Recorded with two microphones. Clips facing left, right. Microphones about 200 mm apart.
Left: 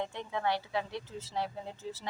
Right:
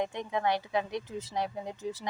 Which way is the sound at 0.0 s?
15° right (ahead or behind).